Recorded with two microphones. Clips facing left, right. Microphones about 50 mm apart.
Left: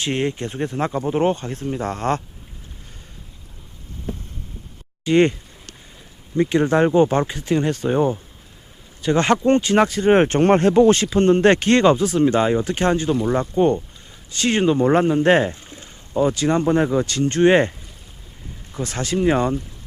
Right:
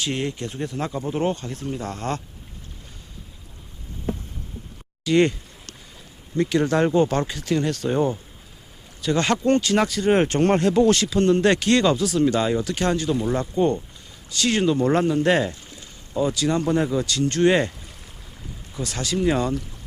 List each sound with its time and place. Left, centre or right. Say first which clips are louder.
0.0 s speech: left 4 dB; left
5.0 s speech: left 3 dB; left
6.3 s speech: left 3 dB; left
9.0 s speech: left 4 dB; left